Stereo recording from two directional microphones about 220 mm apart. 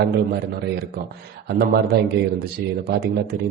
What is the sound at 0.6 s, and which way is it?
Speech, 45° right (ahead or behind).